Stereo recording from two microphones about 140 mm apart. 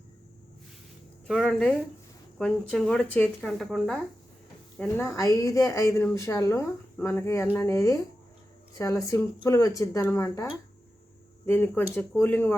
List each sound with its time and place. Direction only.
1.3 s speech: 5° left (ahead or behind)
4.8 s speech: 15° left (ahead or behind)
9.0 s speech: 20° left (ahead or behind)
11.4 s speech: 15° left (ahead or behind)